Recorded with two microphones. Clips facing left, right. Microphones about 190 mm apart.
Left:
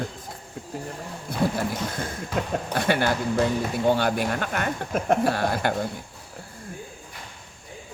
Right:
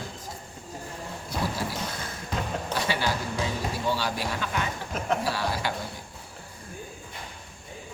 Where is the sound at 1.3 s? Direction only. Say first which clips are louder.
Left 6 dB; 55° left (ahead or behind).